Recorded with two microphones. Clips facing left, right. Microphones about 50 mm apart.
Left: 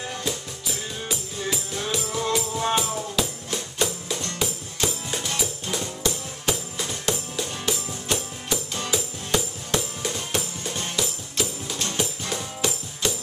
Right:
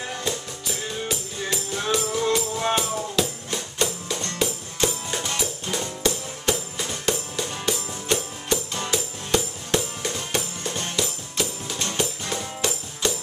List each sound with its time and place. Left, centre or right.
0.2 s music: centre
11.7 s music: centre
12.0 s music: centre